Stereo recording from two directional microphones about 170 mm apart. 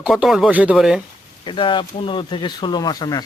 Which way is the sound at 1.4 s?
30° left (ahead or behind).